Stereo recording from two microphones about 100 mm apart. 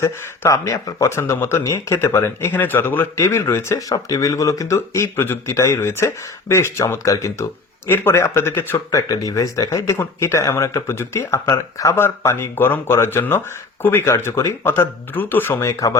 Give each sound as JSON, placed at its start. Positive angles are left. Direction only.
{"t": 0.0, "sound": "speech", "side_deg": 30}
{"t": 9.0, "sound": "speech", "side_deg": 35}